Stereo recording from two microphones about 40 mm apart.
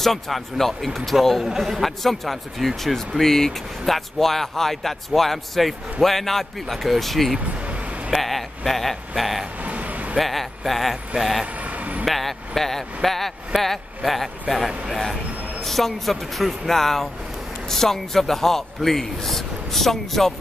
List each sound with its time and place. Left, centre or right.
0.0 s speech: centre
1.4 s a man's voice: centre
1.8 s speech: centre
7.3 s vehicle: right
8.1 s speech: centre
9.6 s a sound: right
10.1 s speech: centre
11.6 s vehicle: right
12.1 s a man's voice: centre